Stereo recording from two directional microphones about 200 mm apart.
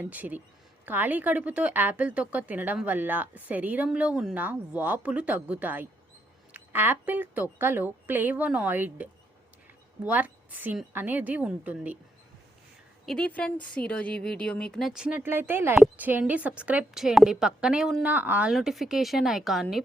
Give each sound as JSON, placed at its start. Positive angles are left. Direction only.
{"t": 0.0, "sound": "a woman's voice", "side_deg": -10}
{"t": 13.1, "sound": "a woman's voice", "side_deg": 5}